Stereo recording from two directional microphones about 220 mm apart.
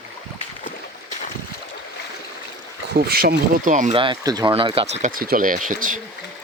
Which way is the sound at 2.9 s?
45° right (ahead or behind).